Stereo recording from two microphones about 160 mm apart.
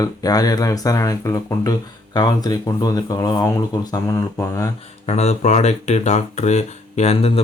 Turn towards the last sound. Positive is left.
turn(degrees=40)  # may be behind; listen again after turning